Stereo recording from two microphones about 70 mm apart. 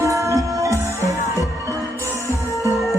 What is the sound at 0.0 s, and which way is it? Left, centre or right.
Music, right.